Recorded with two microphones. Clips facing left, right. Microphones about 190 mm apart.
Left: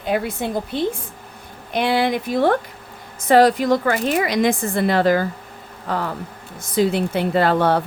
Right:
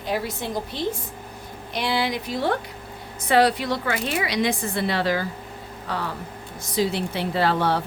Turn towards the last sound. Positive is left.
turn(degrees=55)  # may be behind; listen again after turning